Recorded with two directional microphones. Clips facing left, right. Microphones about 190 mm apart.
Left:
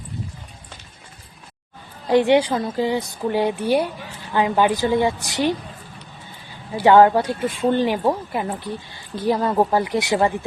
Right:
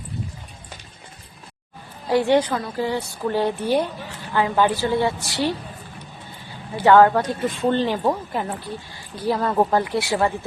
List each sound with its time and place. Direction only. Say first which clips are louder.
2.0 s a woman's voice: left 2 dB; 20° left (ahead or behind)
6.8 s a woman's voice: left 1 dB; 15° left (ahead or behind)